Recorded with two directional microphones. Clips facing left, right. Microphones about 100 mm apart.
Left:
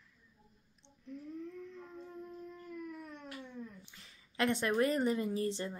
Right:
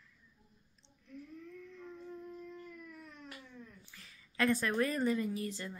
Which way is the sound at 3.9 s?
20° left (ahead or behind).